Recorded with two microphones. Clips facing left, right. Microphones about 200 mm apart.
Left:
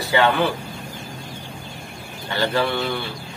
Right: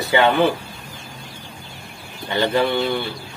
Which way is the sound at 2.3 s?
20° right (ahead or behind).